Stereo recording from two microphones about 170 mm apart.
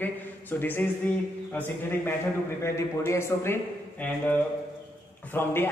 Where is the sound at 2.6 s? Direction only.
15° left (ahead or behind).